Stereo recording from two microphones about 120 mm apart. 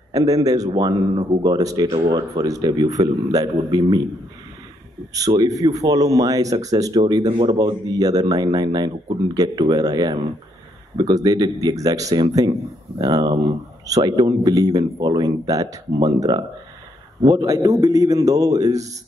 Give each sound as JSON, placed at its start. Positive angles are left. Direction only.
{"t": 0.1, "sound": "speech", "side_deg": -30}
{"t": 2.0, "sound": "speech", "side_deg": -40}
{"t": 5.1, "sound": "speech", "side_deg": -30}
{"t": 7.2, "sound": "speech", "side_deg": -45}
{"t": 7.5, "sound": "speech", "side_deg": -30}